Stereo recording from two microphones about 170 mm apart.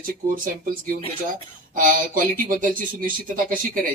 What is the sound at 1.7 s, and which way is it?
Speech, 55° right (ahead or behind).